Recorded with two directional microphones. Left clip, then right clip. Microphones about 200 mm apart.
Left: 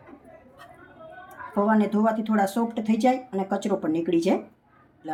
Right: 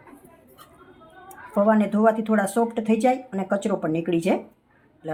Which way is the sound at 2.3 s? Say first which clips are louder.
Right 2 dB; 20° right (ahead or behind).